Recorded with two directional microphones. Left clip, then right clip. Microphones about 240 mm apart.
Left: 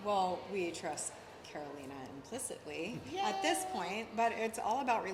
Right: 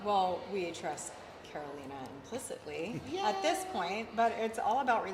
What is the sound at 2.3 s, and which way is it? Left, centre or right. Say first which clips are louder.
A woman's voice: right 3 dB; left.